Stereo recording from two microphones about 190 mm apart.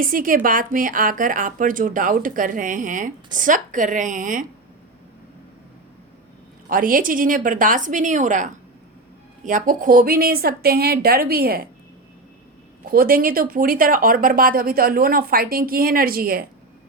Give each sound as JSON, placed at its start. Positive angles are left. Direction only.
{"t": 0.0, "sound": "speech", "side_deg": -45}
{"t": 6.7, "sound": "speech", "side_deg": -45}
{"t": 12.9, "sound": "speech", "side_deg": -50}